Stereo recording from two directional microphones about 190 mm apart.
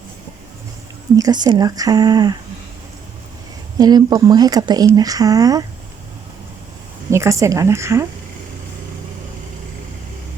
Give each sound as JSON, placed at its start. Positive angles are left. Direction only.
{"t": 1.1, "sound": "speech", "side_deg": -20}
{"t": 3.8, "sound": "speech", "side_deg": -20}
{"t": 7.1, "sound": "a woman's voice", "side_deg": -15}